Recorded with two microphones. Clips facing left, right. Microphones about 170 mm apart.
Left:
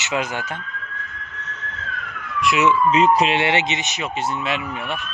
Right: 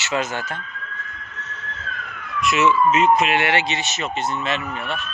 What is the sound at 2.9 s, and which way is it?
Speech, 35° left (ahead or behind).